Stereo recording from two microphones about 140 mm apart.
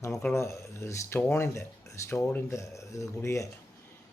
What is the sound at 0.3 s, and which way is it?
Speech, 20° left (ahead or behind).